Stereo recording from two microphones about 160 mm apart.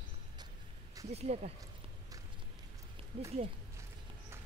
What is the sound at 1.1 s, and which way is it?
Speech, 45° right (ahead or behind).